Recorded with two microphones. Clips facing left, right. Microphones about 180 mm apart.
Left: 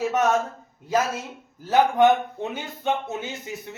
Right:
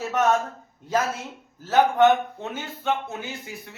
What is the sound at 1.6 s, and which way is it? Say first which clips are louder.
Speech: even; 15° left (ahead or behind).